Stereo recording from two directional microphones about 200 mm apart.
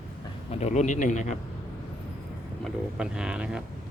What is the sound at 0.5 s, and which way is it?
Speech, 35° left (ahead or behind).